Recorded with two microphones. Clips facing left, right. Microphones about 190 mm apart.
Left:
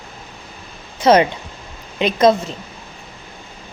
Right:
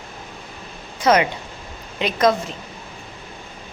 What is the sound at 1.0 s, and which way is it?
A woman's voice, 30° left (ahead or behind).